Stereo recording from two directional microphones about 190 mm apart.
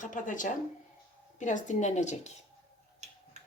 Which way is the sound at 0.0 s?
40° left (ahead or behind).